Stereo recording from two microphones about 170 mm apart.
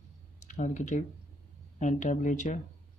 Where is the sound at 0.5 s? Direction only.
45° left (ahead or behind).